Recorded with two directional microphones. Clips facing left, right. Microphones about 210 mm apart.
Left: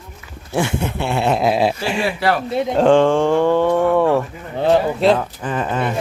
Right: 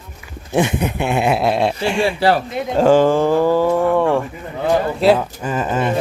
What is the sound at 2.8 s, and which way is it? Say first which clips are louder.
Speech: right 1 dB; 5° right (ahead or behind).